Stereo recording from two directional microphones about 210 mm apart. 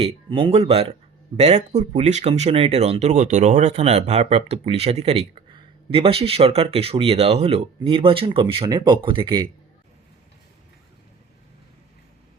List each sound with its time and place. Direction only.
0.0 s speech: 25° right (ahead or behind)